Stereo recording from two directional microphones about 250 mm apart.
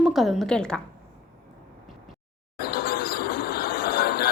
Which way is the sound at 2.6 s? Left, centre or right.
Left.